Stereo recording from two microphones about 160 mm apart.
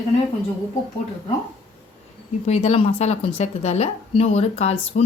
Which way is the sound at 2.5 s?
40° left (ahead or behind).